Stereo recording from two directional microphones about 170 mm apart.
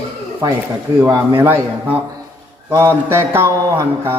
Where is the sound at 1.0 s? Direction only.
15° right (ahead or behind).